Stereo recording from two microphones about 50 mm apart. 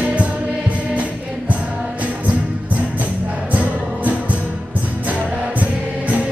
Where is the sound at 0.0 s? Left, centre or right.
Right.